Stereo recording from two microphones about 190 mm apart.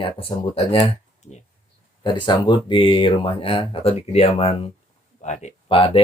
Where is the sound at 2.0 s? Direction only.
25° left (ahead or behind).